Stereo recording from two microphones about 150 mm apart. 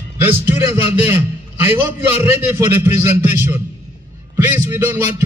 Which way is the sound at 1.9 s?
15° right (ahead or behind).